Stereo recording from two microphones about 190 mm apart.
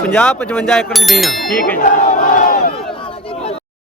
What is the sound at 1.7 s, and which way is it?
Battle cry, 45° left (ahead or behind).